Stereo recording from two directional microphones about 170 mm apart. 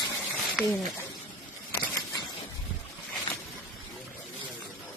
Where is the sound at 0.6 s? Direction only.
Centre (ahead or behind).